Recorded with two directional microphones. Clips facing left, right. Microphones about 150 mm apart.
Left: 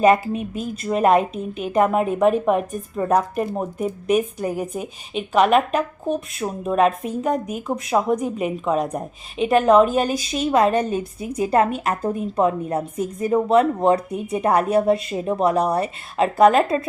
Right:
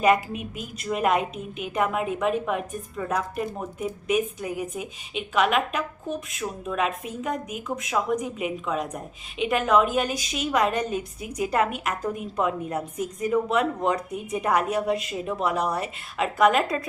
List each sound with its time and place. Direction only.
0.0 s a woman's voice: 35° left (ahead or behind)